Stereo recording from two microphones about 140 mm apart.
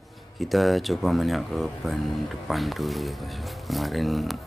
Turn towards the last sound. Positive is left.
turn(degrees=0)  # may be behind; listen again after turning